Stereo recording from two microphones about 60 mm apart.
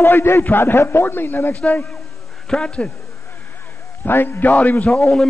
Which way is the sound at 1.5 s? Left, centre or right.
Left.